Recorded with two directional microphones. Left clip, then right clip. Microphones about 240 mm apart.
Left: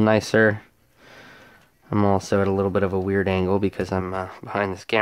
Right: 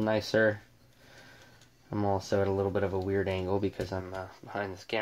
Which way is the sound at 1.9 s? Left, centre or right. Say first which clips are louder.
Left 9 dB; left.